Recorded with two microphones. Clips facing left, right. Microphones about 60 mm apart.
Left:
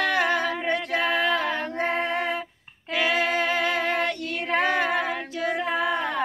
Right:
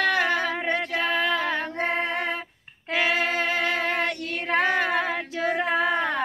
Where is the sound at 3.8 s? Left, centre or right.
Centre.